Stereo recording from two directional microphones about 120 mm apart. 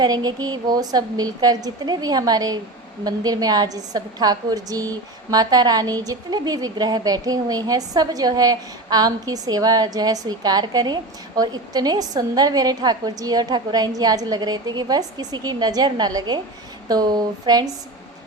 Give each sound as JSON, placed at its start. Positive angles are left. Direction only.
{"t": 0.0, "sound": "a woman's voice", "side_deg": -35}